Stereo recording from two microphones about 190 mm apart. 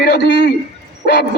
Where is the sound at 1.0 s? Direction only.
60° left (ahead or behind).